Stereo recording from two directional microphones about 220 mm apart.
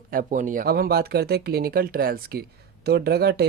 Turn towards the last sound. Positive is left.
turn(degrees=-45)  # may be behind; listen again after turning